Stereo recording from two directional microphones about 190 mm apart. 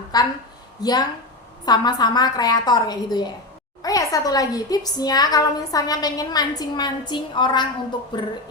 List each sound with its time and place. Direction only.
0.1 s a woman's voice: 20° left (ahead or behind)